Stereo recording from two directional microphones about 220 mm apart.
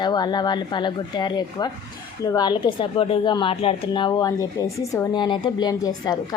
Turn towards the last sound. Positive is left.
turn(degrees=20)  # may be behind; listen again after turning